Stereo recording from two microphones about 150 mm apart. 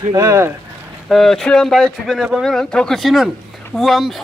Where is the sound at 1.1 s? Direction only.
Centre (ahead or behind).